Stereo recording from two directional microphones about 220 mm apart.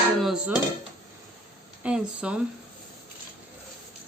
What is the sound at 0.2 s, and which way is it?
Dishes, centre (ahead or behind).